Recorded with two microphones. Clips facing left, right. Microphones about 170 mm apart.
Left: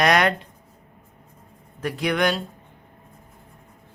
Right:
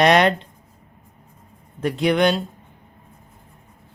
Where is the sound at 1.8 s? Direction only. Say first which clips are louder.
Right 4 dB; 25° right (ahead or behind).